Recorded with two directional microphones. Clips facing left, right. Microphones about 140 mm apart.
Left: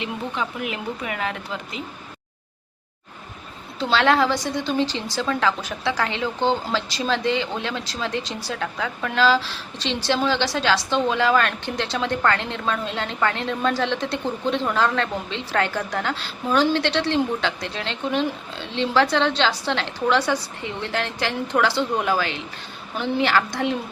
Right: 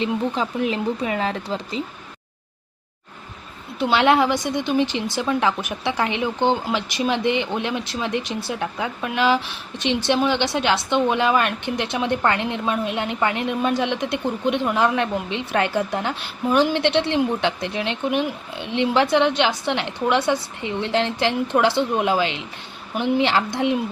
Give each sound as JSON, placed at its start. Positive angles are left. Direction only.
{"t": 0.0, "sound": "speech", "side_deg": -30}
{"t": 3.8, "sound": "a woman's voice", "side_deg": -15}